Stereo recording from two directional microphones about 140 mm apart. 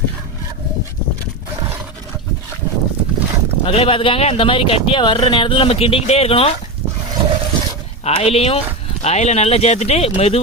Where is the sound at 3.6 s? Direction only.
40° left (ahead or behind).